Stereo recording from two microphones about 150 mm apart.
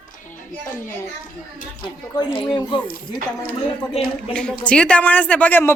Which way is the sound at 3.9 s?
35° left (ahead or behind).